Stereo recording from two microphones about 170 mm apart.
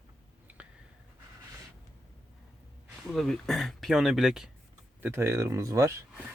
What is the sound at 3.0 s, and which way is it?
Speech, centre (ahead or behind).